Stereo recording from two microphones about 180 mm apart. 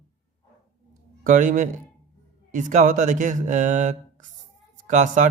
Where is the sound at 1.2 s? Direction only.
45° right (ahead or behind).